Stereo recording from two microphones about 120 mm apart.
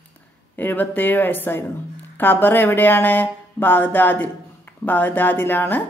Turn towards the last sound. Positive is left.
turn(degrees=15)  # may be behind; listen again after turning